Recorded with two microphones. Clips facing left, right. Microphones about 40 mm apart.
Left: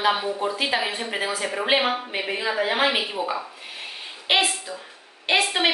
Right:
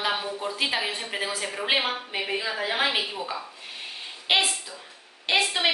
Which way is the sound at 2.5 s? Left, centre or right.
Left.